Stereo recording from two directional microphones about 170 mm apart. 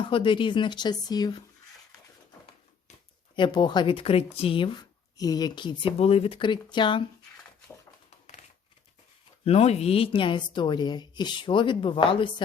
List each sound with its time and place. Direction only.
0.0 s a woman's voice: 30° left (ahead or behind)
3.3 s a woman's voice: 25° left (ahead or behind)
9.4 s a woman's voice: 35° left (ahead or behind)